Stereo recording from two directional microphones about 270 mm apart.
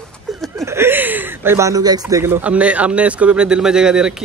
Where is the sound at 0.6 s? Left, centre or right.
Centre.